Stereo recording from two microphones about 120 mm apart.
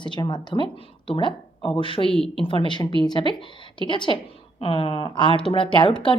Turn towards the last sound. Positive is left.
turn(degrees=40)  # may be behind; listen again after turning